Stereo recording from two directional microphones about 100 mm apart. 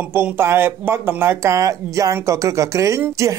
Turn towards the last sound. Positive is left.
turn(degrees=-30)  # may be behind; listen again after turning